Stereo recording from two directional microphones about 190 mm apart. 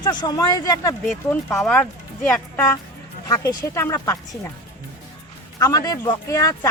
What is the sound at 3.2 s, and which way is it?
Speech, 20° left (ahead or behind).